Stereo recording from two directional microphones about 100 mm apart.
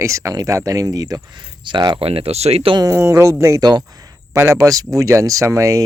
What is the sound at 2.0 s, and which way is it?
Speech, 75° right (ahead or behind).